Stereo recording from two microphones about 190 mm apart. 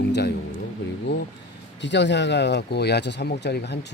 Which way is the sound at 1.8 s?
65° left (ahead or behind).